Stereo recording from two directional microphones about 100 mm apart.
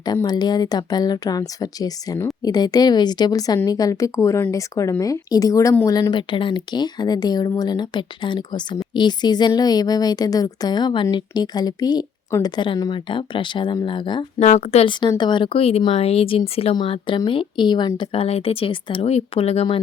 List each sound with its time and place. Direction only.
0.0 s a woman's voice: 45° left (ahead or behind)
6.1 s a woman's voice: 55° left (ahead or behind)
14.3 s speech: 90° left
15.2 s speech: 50° left (ahead or behind)
15.5 s speech: 80° left
15.9 s speech: 90° left; by 16.4 s 70° left (ahead or behind)
16.7 s speech: 55° left (ahead or behind); by 19.6 s 85° left